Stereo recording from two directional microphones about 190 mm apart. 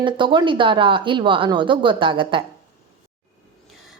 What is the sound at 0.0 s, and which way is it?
Speech, 25° right (ahead or behind).